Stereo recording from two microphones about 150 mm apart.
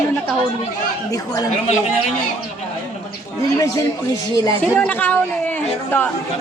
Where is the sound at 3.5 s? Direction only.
25° left (ahead or behind).